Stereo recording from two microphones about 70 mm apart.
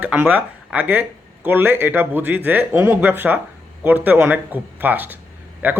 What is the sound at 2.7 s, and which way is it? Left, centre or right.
Speech, right.